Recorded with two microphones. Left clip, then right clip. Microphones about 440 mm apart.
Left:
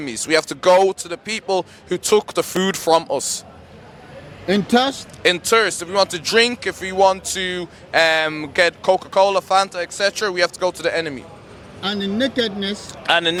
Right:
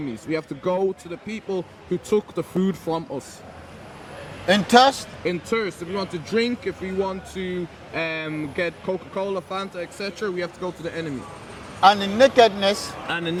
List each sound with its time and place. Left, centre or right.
0.3 s speech: left
4.4 s speech: centre
5.2 s speech: left
11.8 s speech: right
13.1 s speech: left